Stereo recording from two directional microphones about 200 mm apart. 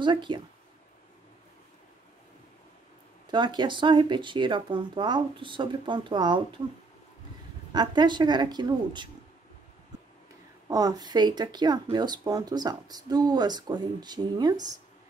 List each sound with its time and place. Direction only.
0.0 s speech: 25° right (ahead or behind)
3.3 s speech: 25° right (ahead or behind)
7.7 s speech: 20° right (ahead or behind)
10.7 s speech: 20° right (ahead or behind)